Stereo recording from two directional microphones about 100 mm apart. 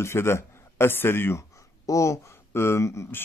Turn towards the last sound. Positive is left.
turn(degrees=25)  # may be behind; listen again after turning